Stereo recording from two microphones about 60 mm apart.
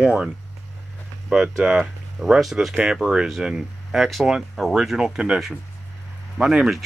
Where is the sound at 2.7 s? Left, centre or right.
Centre.